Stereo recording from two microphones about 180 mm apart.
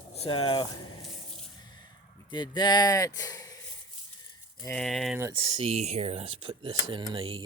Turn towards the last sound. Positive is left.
turn(degrees=-30)  # may be behind; listen again after turning